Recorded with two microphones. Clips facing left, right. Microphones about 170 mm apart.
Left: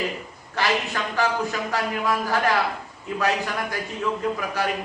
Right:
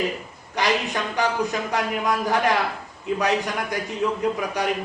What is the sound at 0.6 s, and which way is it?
A man's voice, 15° right (ahead or behind).